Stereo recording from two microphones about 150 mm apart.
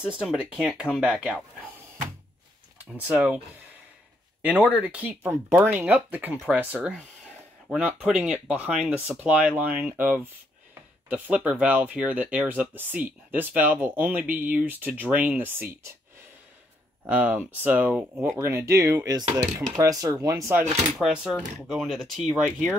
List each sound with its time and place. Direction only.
0.0 s speech: 5° right (ahead or behind)
2.8 s speech: 10° right (ahead or behind)
17.0 s speech: 10° right (ahead or behind)
18.4 s speech: 15° right (ahead or behind)
21.0 s speech: 5° right (ahead or behind)